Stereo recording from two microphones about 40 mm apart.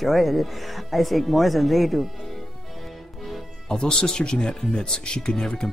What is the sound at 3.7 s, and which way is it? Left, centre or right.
Speech, centre.